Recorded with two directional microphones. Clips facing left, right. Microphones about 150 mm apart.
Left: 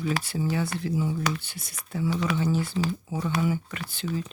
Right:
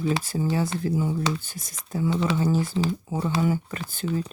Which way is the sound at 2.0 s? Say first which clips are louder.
Right 2 dB; 25° right (ahead or behind).